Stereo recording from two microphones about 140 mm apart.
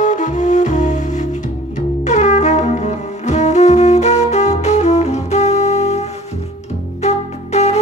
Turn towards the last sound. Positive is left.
turn(degrees=50)  # may be behind; listen again after turning